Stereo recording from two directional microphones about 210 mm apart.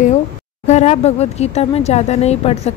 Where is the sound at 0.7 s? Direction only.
30° left (ahead or behind).